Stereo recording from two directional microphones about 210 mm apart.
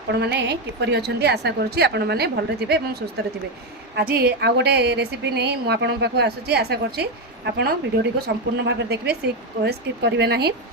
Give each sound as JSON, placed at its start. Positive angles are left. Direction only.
{"t": 0.1, "sound": "a woman's voice", "side_deg": -55}